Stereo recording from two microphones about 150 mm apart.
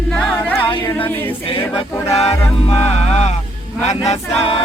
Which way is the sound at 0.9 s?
15° left (ahead or behind).